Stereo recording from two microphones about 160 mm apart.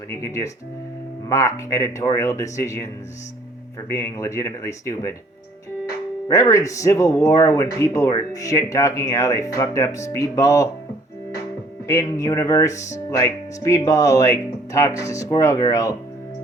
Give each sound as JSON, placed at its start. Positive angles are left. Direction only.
{"t": 0.1, "sound": "speech", "side_deg": 20}
{"t": 3.8, "sound": "speech", "side_deg": 20}
{"t": 6.2, "sound": "speech", "side_deg": 20}
{"t": 11.9, "sound": "speech", "side_deg": 20}